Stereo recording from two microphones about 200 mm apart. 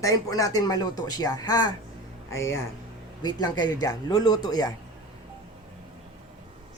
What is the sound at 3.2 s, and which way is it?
Speech, 20° left (ahead or behind).